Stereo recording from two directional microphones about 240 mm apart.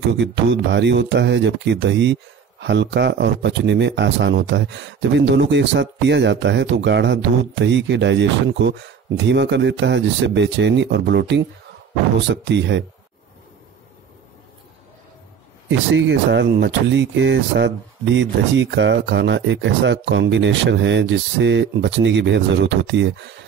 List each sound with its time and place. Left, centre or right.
0.2 s speech: right
15.9 s speech: right